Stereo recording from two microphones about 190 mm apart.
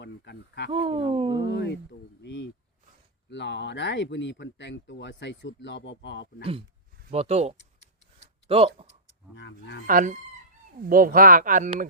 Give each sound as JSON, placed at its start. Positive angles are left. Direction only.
{"t": 0.0, "sound": "speech", "side_deg": 65}
{"t": 0.7, "sound": "speech", "side_deg": -30}
{"t": 1.4, "sound": "speech", "side_deg": 65}
{"t": 6.4, "sound": "speech", "side_deg": -30}
{"t": 9.3, "sound": "speech", "side_deg": 65}
{"t": 9.8, "sound": "speech", "side_deg": -45}